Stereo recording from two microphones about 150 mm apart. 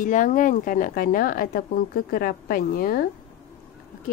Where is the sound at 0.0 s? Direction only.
60° left (ahead or behind); by 3.1 s 75° left (ahead or behind).